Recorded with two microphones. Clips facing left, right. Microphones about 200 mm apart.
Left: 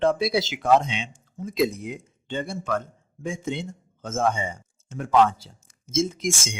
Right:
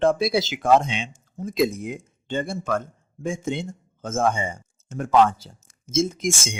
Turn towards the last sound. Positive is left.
turn(degrees=-50)  # may be behind; listen again after turning